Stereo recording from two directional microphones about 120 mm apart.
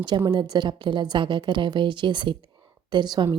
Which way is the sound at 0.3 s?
35° right (ahead or behind).